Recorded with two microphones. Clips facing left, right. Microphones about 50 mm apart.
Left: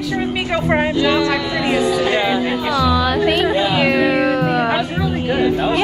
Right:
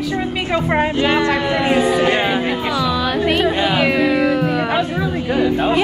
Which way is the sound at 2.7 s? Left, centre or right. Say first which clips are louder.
Left 5 dB; centre.